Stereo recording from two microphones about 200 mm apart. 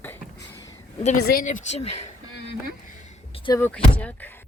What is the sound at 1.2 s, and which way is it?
Speech, 50° left (ahead or behind).